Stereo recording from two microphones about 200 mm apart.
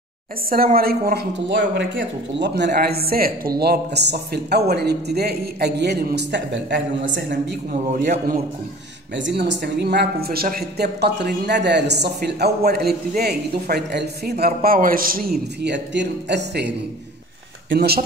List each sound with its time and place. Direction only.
0.5 s speech: 45° right (ahead or behind)
7.7 s a man's voice: 40° right (ahead or behind)
9.1 s speech: 60° right (ahead or behind); by 15.3 s 45° right (ahead or behind)
15.6 s speech: 60° right (ahead or behind)